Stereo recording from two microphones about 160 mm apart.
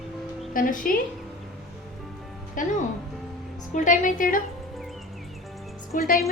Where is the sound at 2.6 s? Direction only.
55° left (ahead or behind).